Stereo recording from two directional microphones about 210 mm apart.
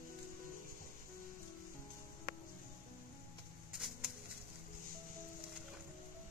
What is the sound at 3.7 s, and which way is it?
Bird, centre (ahead or behind).